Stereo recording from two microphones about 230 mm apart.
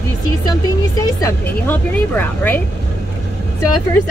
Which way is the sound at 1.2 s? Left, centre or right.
Centre.